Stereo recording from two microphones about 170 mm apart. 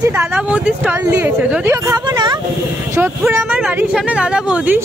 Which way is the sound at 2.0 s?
25° right (ahead or behind).